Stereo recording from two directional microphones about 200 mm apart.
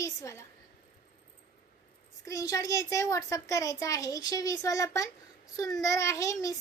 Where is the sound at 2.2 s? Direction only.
15° left (ahead or behind).